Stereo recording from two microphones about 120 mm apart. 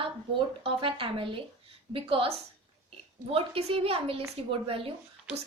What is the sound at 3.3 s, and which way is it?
A woman's voice, 55° right (ahead or behind).